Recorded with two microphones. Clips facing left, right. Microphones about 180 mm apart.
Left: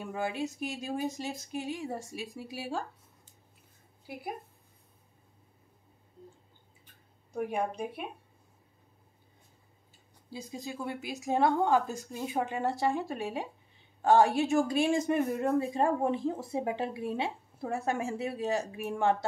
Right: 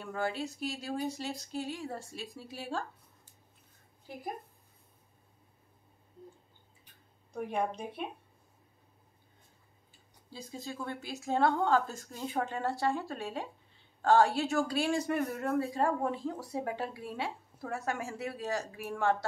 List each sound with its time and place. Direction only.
0.0 s speech: 15° left (ahead or behind)
4.1 s speech: 10° left (ahead or behind)
7.3 s speech: 10° left (ahead or behind)
10.3 s speech: 15° left (ahead or behind)